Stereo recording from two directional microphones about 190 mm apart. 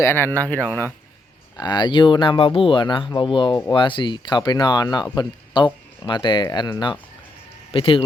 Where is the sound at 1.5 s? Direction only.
20° left (ahead or behind).